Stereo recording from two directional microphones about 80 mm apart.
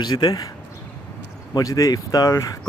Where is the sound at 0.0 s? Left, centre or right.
Left.